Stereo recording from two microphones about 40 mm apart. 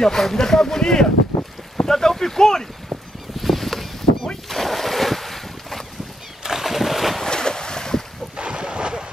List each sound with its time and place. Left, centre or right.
0.0 s speech: centre
3.3 s boat: centre
6.4 s a sound: centre
7.2 s boat: centre
8.4 s wind noise: right